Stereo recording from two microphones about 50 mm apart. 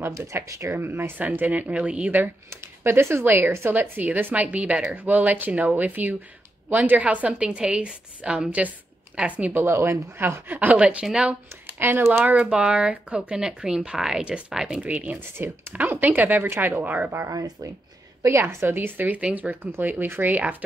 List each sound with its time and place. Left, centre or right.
0.1 s speech: right
0.7 s speech: right
1.1 s speech: right
2.5 s speech: right
3.8 s a woman's voice: right; by 8.5 s centre
8.5 s a woman's voice: right
9.5 s speech: right
10.8 s a woman's voice: right
11.8 s speech: right
12.3 s a woman's voice: right
14.8 s speech: right
15.4 s speech: right
15.7 s speech: right
18.5 s speech: right